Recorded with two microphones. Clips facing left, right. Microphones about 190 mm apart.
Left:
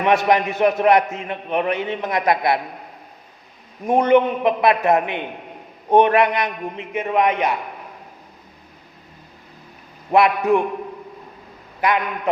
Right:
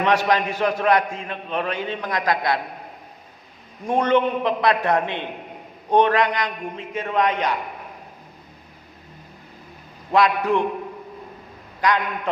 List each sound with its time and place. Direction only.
0.0 s a man's voice: 15° left (ahead or behind)
3.8 s a man's voice: 15° left (ahead or behind)
10.1 s a man's voice: 20° left (ahead or behind)
11.8 s a man's voice: 20° left (ahead or behind)